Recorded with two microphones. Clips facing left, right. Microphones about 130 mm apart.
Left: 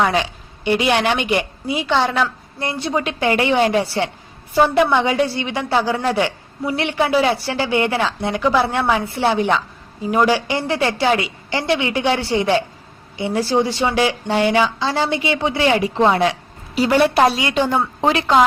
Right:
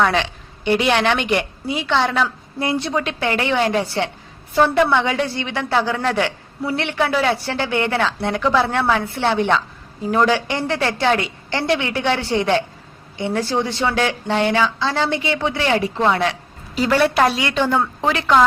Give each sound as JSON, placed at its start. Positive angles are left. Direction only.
{"t": 0.0, "sound": "a woman's voice", "side_deg": 10}
{"t": 2.9, "sound": "a woman's voice", "side_deg": 10}